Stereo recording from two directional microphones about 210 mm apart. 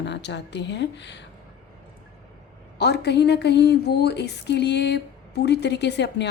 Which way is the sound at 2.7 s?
50° left (ahead or behind).